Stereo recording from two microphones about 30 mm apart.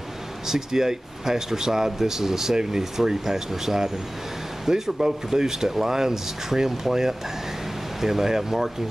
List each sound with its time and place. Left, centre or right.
0.5 s speech: centre